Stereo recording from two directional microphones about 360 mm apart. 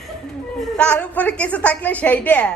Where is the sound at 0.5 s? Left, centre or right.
Centre.